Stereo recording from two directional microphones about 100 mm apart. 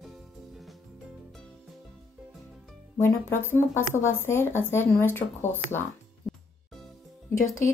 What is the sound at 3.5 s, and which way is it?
Speech, 25° left (ahead or behind).